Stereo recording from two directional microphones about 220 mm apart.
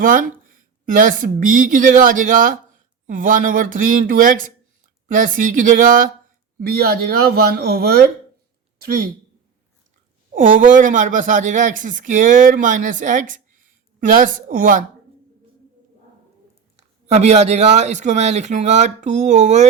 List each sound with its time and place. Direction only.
0.0 s speech: 40° right (ahead or behind)
10.3 s speech: 35° right (ahead or behind)
16.7 s speech: 30° right (ahead or behind)